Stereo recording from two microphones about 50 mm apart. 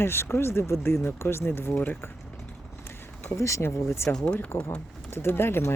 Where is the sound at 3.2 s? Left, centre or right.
Left.